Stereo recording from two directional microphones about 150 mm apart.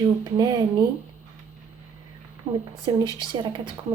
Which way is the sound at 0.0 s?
25° right (ahead or behind).